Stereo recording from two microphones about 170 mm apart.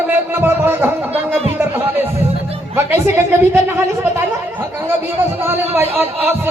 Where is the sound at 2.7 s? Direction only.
15° right (ahead or behind).